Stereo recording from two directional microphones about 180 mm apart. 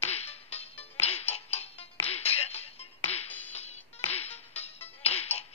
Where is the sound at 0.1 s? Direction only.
35° left (ahead or behind).